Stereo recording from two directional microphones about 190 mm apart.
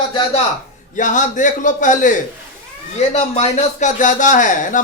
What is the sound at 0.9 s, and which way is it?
A man's voice, 40° left (ahead or behind).